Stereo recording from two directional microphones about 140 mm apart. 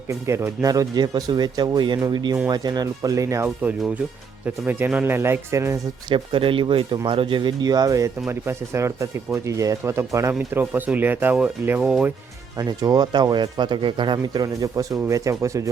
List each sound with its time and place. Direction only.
0.1 s speech: 20° right (ahead or behind)
6.1 s speech: 35° right (ahead or behind); by 12.1 s 5° right (ahead or behind)
12.5 s speech: 25° right (ahead or behind)